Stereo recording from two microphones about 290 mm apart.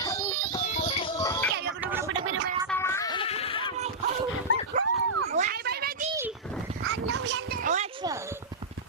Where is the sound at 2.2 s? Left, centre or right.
Right.